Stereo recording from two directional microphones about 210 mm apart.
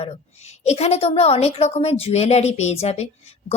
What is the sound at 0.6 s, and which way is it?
A woman's voice, 30° left (ahead or behind).